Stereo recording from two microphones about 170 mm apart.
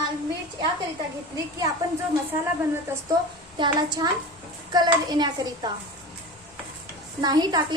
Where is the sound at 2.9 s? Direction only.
15° right (ahead or behind).